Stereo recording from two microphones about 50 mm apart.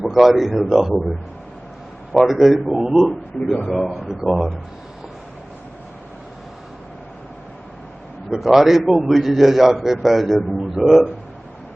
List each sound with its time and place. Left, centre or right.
0.0 s a man's voice: centre
2.1 s a man's voice: centre
3.7 s a man's voice: centre
8.3 s a man's voice: centre